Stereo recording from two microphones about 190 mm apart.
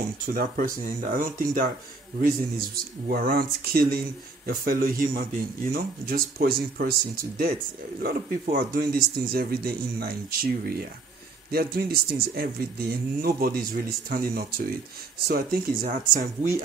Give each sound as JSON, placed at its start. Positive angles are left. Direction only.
{"t": 0.3, "sound": "a man's voice", "side_deg": -45}